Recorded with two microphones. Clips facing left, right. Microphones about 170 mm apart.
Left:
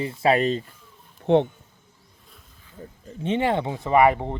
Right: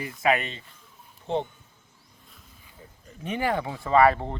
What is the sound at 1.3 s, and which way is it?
Speech, 65° left (ahead or behind).